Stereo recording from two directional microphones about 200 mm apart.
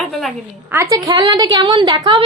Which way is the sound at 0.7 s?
15° right (ahead or behind).